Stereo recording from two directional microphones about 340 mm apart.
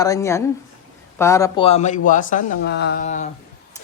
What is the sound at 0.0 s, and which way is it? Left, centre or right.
A man's voice, centre.